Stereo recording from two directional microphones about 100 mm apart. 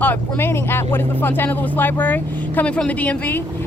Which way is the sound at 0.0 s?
20° left (ahead or behind).